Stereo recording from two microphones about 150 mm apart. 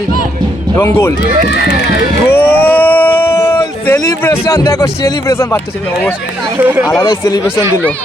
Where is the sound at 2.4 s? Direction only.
10° left (ahead or behind).